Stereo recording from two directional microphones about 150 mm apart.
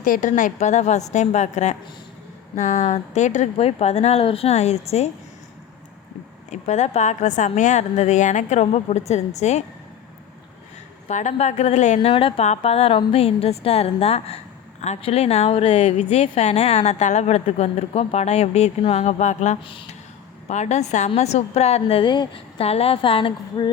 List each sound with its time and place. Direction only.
0.0 s a woman's voice: 60° left (ahead or behind)
6.5 s a woman's voice: 50° left (ahead or behind)
11.1 s a woman's voice: 50° left (ahead or behind)
11.9 s a woman's voice: 35° left (ahead or behind); by 19.5 s 55° left (ahead or behind)
19.6 s speech: 35° left (ahead or behind)
20.5 s a woman's voice: 50° left (ahead or behind)